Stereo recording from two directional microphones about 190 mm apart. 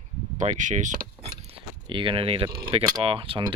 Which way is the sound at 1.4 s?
30° right (ahead or behind).